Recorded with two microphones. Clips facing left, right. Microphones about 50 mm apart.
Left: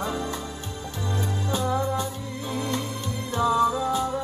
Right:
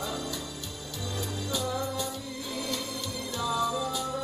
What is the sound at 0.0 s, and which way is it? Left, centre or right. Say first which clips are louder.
Music: left 5 dB; left.